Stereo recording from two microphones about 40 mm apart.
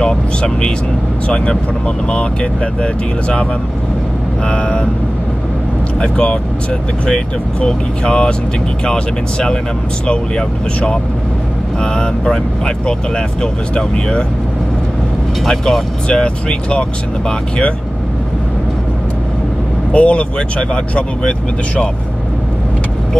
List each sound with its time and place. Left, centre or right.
0.0 s vehicle: left
1.3 s speech: left
4.5 s speech: left
5.9 s speech: left
7.6 s speech: left
11.8 s speech: centre
15.4 s speech: centre
16.1 s speech: left
19.9 s speech: left